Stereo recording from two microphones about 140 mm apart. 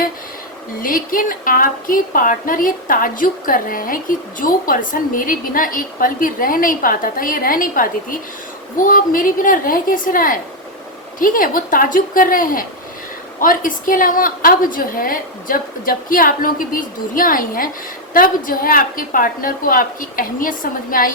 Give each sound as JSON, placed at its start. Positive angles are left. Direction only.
{"t": 0.8, "sound": "a woman's voice", "side_deg": 80}